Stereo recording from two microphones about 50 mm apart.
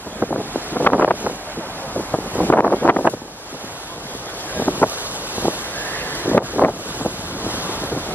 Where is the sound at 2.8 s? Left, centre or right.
Left.